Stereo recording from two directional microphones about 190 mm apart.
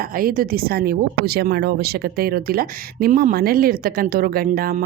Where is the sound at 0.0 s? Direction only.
50° right (ahead or behind).